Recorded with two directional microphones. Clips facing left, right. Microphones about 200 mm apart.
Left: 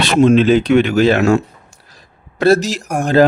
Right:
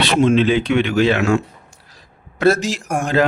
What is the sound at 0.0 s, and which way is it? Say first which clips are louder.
A man's voice: left 4 dB; 45° left (ahead or behind).